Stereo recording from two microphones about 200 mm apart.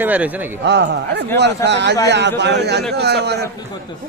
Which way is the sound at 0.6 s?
55° right (ahead or behind).